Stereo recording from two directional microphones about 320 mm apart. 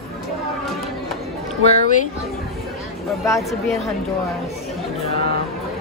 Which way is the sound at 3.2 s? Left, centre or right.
Centre.